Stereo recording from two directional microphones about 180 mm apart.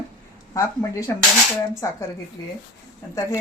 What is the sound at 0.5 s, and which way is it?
Speech, 20° left (ahead or behind).